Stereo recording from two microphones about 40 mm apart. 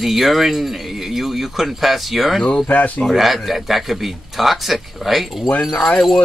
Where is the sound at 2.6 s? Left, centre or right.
Left.